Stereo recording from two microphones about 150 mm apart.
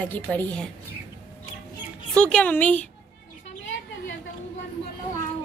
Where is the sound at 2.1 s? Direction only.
5° left (ahead or behind).